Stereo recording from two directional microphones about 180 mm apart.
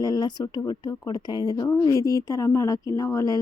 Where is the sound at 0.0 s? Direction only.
20° left (ahead or behind).